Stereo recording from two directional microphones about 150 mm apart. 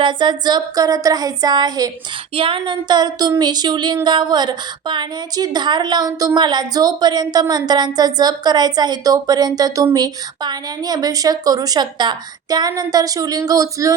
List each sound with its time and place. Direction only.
0.0 s a woman's voice: 30° right (ahead or behind)